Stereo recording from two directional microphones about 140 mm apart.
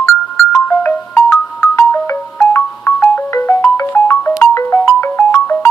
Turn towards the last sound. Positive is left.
turn(degrees=15)  # may be behind; listen again after turning